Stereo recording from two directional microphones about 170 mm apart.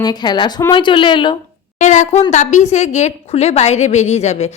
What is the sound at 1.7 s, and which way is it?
A woman's voice, 45° left (ahead or behind).